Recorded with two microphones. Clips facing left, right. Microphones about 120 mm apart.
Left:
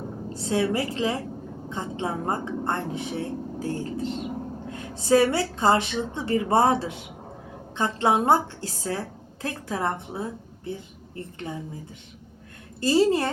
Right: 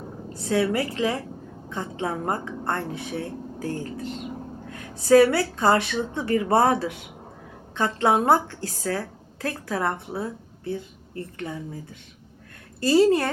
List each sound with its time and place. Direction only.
0.3 s a woman's voice: 25° left (ahead or behind)
12.8 s a woman's voice: 20° left (ahead or behind)